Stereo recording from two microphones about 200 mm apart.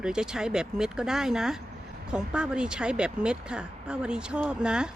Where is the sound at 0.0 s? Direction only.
5° right (ahead or behind).